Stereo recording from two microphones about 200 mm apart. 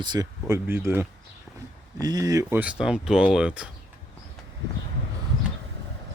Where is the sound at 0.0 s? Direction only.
20° right (ahead or behind).